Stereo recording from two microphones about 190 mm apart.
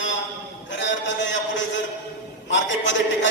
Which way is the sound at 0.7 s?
75° left (ahead or behind).